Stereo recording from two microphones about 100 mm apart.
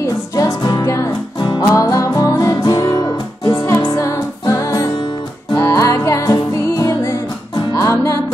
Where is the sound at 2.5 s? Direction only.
45° left (ahead or behind).